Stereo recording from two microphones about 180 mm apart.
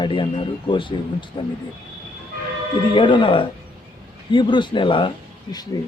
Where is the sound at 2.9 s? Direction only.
25° left (ahead or behind).